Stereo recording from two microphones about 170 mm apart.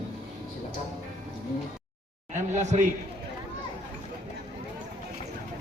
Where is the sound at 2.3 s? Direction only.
45° right (ahead or behind).